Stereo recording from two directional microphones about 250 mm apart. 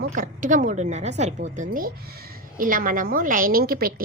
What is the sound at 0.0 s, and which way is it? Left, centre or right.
A woman's voice, right.